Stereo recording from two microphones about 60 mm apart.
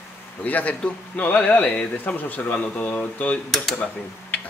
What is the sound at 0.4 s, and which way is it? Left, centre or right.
Speech, left.